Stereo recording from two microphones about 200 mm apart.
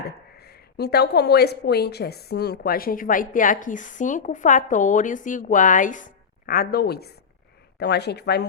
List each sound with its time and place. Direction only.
0.3 s a woman's voice: 55° left (ahead or behind)